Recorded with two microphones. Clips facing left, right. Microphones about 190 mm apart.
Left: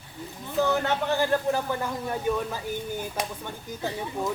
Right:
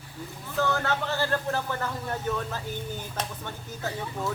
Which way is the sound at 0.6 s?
20° left (ahead or behind).